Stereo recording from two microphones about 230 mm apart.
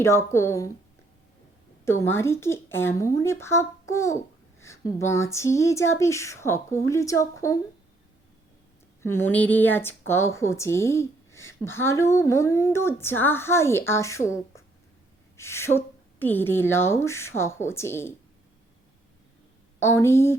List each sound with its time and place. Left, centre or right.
0.0 s a woman's voice: centre
1.8 s a woman's voice: centre
9.0 s a woman's voice: centre
15.4 s a woman's voice: centre
19.8 s a woman's voice: centre